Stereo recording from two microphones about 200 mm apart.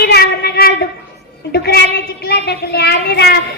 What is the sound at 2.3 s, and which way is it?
Child singing, 55° left (ahead or behind).